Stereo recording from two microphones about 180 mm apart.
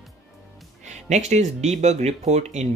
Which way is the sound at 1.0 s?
40° right (ahead or behind).